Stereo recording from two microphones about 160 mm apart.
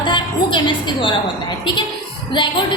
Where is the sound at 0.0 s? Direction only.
30° left (ahead or behind).